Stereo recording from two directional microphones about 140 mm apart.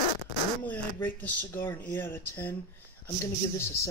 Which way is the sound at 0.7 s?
15° left (ahead or behind).